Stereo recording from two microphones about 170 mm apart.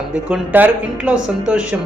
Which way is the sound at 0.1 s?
10° right (ahead or behind).